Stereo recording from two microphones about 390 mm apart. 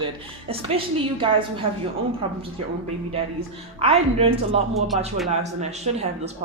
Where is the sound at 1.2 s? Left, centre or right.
Centre.